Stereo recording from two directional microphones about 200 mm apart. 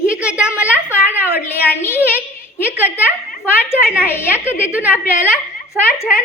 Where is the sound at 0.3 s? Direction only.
5° right (ahead or behind).